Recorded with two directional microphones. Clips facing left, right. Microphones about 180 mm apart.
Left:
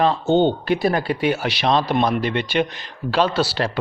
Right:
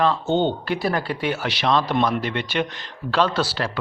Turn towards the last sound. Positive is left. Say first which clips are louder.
# left 2 dB
turn(degrees=10)  # may be behind; listen again after turning